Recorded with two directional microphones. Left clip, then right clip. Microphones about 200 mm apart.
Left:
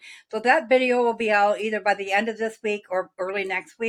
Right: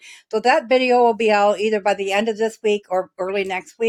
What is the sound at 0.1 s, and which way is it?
Speech, 60° right (ahead or behind).